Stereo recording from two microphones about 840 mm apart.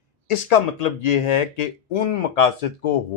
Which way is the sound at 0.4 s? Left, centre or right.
Left.